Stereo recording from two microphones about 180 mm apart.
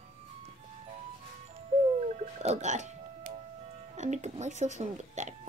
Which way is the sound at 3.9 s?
40° right (ahead or behind).